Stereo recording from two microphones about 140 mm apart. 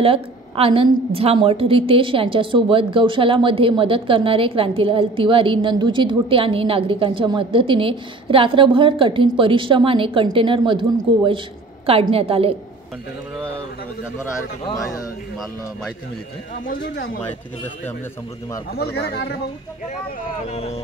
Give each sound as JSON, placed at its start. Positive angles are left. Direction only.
{"t": 0.0, "sound": "a woman's voice", "side_deg": -40}
{"t": 14.7, "sound": "speech", "side_deg": 25}
{"t": 16.6, "sound": "speech", "side_deg": 90}
{"t": 20.4, "sound": "speech", "side_deg": 45}